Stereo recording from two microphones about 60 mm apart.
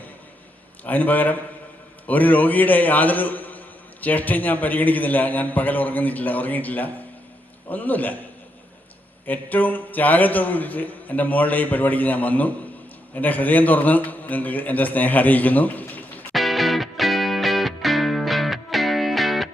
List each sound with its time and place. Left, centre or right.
0.9 s a man's voice: left
9.2 s a man's voice: left
16.3 s music: centre